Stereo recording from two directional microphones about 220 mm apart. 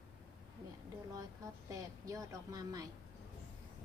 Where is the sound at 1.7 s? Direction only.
15° right (ahead or behind).